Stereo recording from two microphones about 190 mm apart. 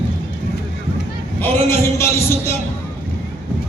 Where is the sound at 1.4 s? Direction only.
15° left (ahead or behind).